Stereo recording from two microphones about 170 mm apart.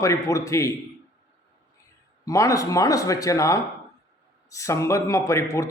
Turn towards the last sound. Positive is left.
turn(degrees=20)  # may be behind; listen again after turning